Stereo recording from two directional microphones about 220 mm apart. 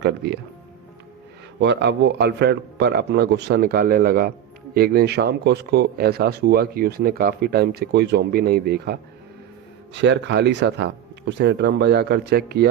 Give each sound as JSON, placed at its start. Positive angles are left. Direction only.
{"t": 1.6, "sound": "speech", "side_deg": -50}